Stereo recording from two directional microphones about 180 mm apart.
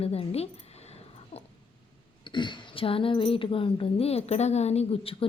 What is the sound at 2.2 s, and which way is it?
Speech, 25° left (ahead or behind).